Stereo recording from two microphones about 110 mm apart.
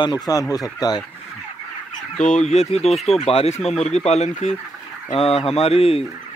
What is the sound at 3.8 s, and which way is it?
Speech, 90° left.